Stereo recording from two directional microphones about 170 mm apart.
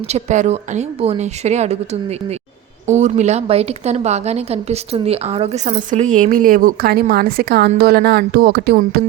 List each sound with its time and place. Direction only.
0.1 s a woman's voice: 45° right (ahead or behind); by 9.0 s 65° right (ahead or behind)